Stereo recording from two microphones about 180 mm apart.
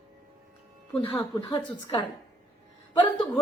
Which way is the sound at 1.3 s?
30° left (ahead or behind).